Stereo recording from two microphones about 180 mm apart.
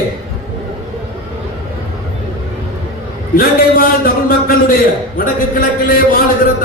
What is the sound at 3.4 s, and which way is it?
A man's voice, 55° left (ahead or behind).